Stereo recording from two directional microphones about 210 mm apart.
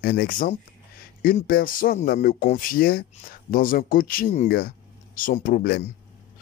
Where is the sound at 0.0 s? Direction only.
45° left (ahead or behind).